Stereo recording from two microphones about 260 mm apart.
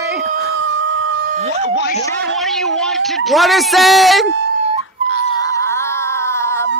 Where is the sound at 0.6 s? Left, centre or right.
Right.